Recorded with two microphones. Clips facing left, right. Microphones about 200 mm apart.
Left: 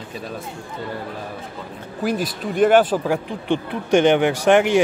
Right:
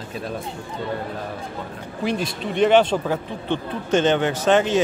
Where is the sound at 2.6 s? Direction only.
5° left (ahead or behind).